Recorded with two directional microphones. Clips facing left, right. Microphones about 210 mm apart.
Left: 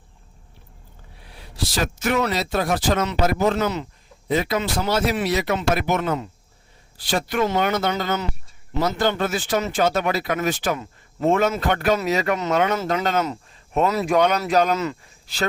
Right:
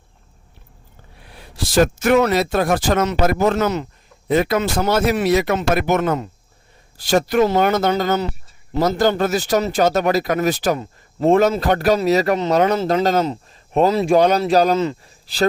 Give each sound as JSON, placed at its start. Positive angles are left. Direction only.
{"t": 1.5, "sound": "speech", "side_deg": -50}